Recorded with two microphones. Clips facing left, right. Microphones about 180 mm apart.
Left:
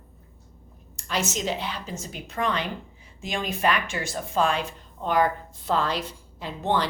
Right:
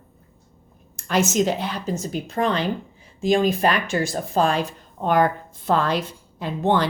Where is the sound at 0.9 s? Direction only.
50° right (ahead or behind).